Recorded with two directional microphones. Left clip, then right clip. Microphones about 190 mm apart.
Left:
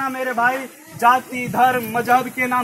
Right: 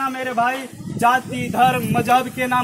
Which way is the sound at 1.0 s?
15° right (ahead or behind).